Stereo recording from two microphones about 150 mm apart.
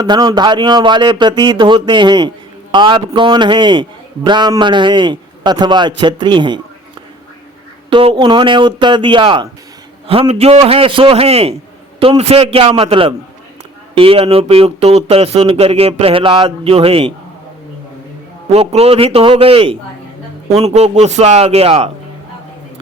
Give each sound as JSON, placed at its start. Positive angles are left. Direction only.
{"t": 0.0, "sound": "a man's voice", "side_deg": -25}
{"t": 7.9, "sound": "speech", "side_deg": -35}
{"t": 18.4, "sound": "a man's voice", "side_deg": -40}